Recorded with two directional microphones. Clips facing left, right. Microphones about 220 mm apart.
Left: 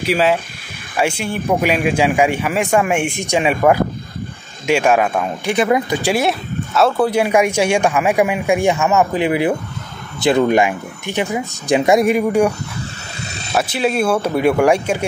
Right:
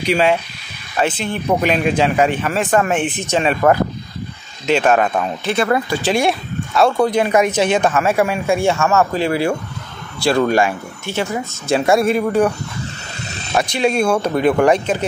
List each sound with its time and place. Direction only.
0.0 s speech: 5° left (ahead or behind)
6.2 s speech: centre (ahead or behind)